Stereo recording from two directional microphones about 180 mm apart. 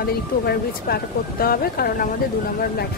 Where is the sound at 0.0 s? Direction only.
60° left (ahead or behind).